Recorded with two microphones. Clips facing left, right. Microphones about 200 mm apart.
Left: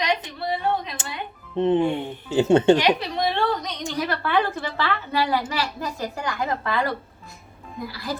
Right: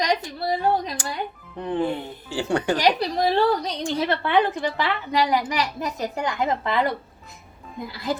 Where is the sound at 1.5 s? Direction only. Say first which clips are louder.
Left 5 dB; 25° left (ahead or behind).